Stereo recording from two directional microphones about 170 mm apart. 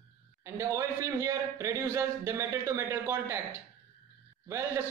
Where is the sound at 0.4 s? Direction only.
15° right (ahead or behind).